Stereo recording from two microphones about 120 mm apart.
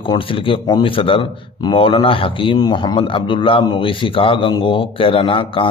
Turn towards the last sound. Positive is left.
turn(degrees=45)  # may be behind; listen again after turning